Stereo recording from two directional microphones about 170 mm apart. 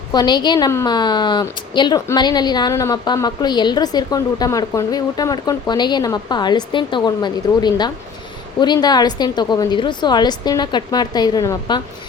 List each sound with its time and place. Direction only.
0.1 s a woman's voice: 25° left (ahead or behind)